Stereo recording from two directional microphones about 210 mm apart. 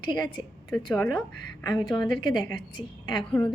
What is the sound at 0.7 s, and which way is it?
A woman's voice, 5° left (ahead or behind).